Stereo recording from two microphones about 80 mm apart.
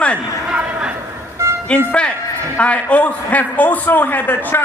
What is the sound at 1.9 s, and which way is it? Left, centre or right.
A man's voice, centre.